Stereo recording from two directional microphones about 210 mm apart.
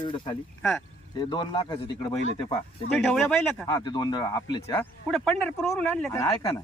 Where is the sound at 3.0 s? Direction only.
5° left (ahead or behind).